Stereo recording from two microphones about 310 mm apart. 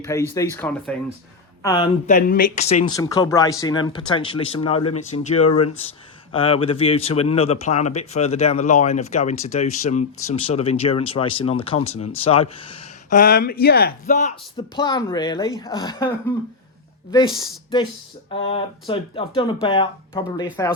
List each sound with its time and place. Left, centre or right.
0.0 s speech: centre
2.0 s speech: left
5.1 s speech: left
6.3 s speech: centre